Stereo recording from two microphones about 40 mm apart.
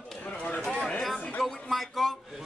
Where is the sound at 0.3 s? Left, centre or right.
Left.